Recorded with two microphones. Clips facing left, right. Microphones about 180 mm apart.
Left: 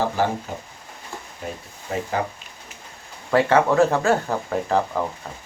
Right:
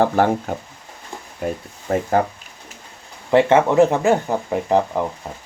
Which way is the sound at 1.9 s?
45° right (ahead or behind).